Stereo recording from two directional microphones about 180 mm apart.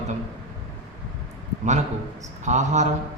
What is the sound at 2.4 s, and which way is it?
Speech, 40° right (ahead or behind).